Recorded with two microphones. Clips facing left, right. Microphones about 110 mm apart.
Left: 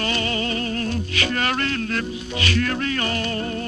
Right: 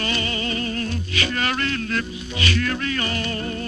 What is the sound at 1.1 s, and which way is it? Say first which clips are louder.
Music: even; 50° left (ahead or behind).